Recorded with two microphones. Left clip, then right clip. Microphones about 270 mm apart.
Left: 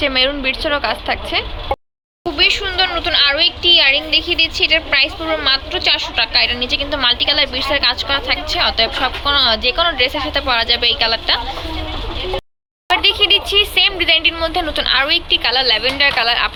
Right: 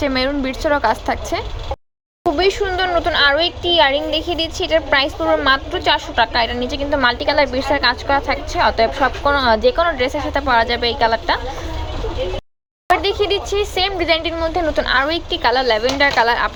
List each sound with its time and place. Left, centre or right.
0.0 s a woman's voice: centre
2.5 s a woman's voice: centre
12.9 s a woman's voice: centre